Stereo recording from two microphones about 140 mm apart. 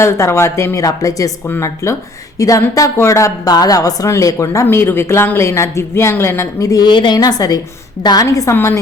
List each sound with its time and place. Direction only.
0.0 s a woman's voice: 20° left (ahead or behind)